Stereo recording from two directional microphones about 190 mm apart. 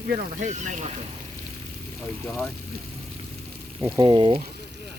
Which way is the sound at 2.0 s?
5° left (ahead or behind).